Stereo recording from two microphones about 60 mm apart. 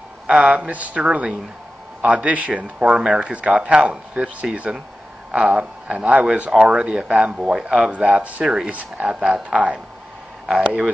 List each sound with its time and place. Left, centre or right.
0.3 s speech: right